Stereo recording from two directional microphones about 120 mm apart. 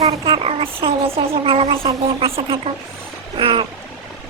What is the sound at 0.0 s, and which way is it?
Speech, 50° right (ahead or behind).